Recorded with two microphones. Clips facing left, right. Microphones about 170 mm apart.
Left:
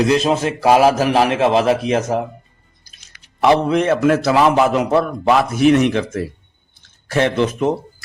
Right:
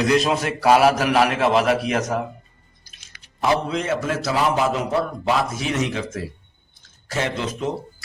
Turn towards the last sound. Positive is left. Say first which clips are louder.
# left 8 dB
turn(degrees=60)  # may be behind; listen again after turning